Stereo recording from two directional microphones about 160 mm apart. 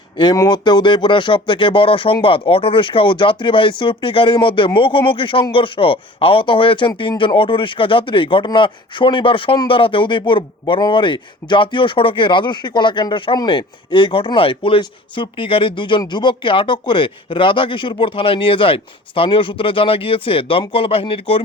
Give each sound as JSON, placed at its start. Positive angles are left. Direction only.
{"t": 0.2, "sound": "speech", "side_deg": 25}